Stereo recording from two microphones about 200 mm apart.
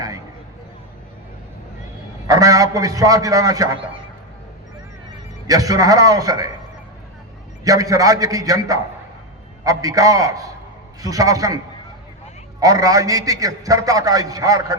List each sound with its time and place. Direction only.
2.2 s a man's voice: 15° right (ahead or behind)
5.5 s a man's voice: 15° right (ahead or behind)
7.6 s a man's voice: 15° right (ahead or behind)